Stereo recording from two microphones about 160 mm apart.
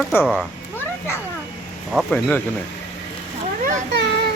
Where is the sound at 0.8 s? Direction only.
15° left (ahead or behind).